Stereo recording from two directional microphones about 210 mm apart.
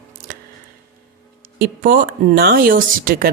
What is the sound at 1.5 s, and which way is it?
Speech, 45° right (ahead or behind).